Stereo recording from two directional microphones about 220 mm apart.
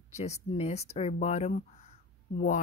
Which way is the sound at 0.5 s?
30° left (ahead or behind).